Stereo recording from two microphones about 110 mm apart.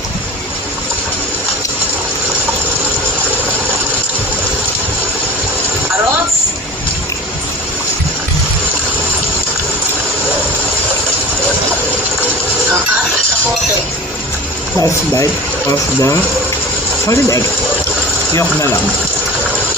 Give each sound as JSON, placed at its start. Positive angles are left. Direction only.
{"t": 15.2, "sound": "speech", "side_deg": 30}